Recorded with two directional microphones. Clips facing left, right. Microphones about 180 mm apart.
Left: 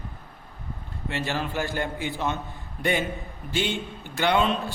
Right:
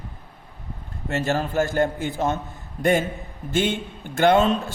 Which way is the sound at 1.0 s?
45° right (ahead or behind).